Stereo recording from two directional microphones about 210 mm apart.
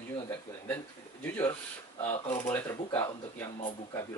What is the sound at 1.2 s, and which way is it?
Speech, 10° left (ahead or behind).